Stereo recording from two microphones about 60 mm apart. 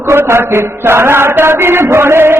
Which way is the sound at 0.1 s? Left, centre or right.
Right.